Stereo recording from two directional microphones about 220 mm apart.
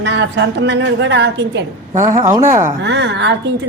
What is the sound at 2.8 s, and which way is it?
Speech, 50° right (ahead or behind).